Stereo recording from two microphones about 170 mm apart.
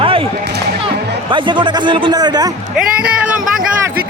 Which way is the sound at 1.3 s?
30° right (ahead or behind).